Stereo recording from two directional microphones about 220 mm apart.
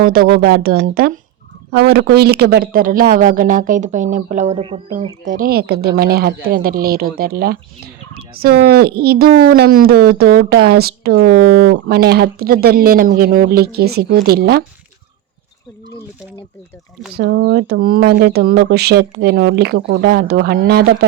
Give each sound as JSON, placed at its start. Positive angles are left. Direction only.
{"t": 0.0, "sound": "speech", "side_deg": -40}
{"t": 17.2, "sound": "speech", "side_deg": -45}